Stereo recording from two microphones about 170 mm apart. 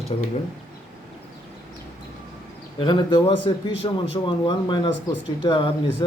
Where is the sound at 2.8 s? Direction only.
25° left (ahead or behind).